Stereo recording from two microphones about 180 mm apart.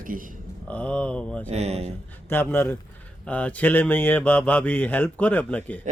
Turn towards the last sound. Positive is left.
turn(degrees=10)  # may be behind; listen again after turning